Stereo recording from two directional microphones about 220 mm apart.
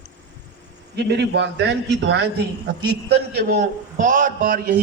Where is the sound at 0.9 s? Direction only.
50° right (ahead or behind).